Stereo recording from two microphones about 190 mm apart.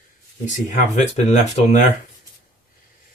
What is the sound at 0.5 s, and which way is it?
Speech, 35° left (ahead or behind).